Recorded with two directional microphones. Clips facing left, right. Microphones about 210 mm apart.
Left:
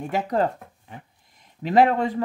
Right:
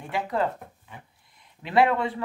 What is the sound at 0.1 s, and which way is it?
Speech, 40° left (ahead or behind).